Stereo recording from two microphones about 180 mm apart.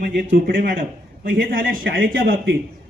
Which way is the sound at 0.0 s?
50° right (ahead or behind).